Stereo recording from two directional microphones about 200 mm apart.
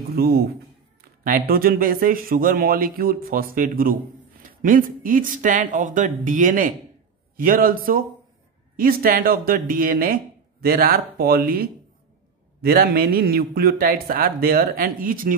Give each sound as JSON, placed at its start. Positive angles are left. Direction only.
{"t": 0.1, "sound": "a man's voice", "side_deg": -50}
{"t": 1.5, "sound": "a man's voice", "side_deg": -45}